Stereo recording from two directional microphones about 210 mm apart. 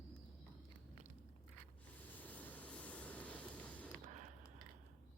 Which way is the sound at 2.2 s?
10° left (ahead or behind).